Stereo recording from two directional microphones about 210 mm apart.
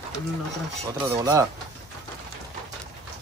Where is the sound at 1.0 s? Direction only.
15° right (ahead or behind).